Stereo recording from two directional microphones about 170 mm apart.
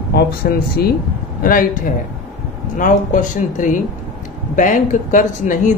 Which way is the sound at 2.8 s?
50° left (ahead or behind).